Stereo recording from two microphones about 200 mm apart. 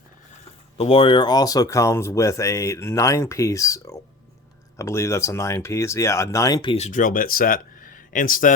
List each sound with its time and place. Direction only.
0.8 s speech: 30° left (ahead or behind); by 8.5 s 45° left (ahead or behind)